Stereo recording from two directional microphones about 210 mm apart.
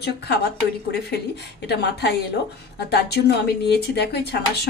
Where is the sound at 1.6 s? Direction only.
50° left (ahead or behind).